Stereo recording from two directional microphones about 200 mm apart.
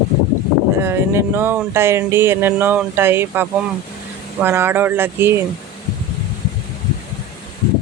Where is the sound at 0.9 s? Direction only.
10° right (ahead or behind).